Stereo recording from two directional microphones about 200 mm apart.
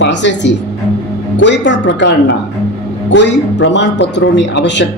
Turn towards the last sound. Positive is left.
turn(degrees=60)  # may be behind; listen again after turning